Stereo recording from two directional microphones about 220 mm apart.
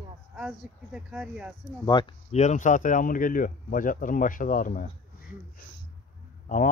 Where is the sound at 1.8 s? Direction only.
20° left (ahead or behind).